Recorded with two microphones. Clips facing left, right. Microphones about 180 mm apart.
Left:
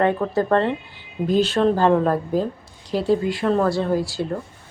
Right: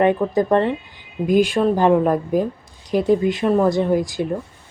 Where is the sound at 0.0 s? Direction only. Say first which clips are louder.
Right 3 dB; 15° right (ahead or behind).